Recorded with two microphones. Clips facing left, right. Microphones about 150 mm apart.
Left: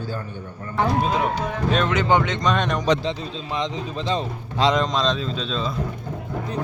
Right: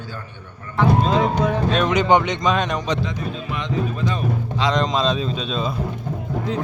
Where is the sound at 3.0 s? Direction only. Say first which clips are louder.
Right 1 dB; 25° left (ahead or behind).